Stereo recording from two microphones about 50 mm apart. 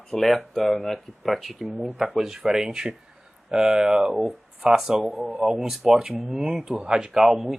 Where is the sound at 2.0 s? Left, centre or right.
Centre.